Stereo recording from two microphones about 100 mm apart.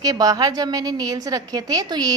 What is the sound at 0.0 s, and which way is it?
A woman's voice, 40° right (ahead or behind).